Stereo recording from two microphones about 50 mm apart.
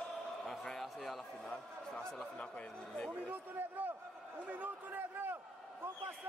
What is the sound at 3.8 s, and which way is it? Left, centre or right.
A man's voice, right.